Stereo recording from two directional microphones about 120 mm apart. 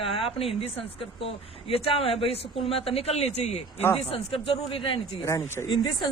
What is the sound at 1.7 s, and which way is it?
Speech, 55° left (ahead or behind).